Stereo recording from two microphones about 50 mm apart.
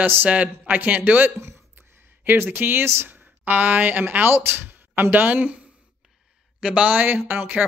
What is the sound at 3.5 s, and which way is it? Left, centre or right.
Speech, right.